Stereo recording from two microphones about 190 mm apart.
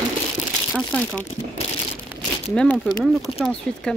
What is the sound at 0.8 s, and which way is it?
Speech, centre (ahead or behind).